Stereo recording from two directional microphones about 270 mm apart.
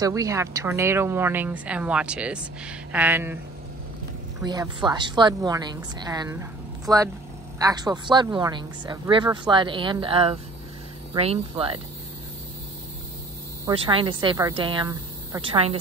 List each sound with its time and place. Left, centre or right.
0.0 s a woman's voice: centre
4.4 s a woman's voice: centre
13.7 s a woman's voice: centre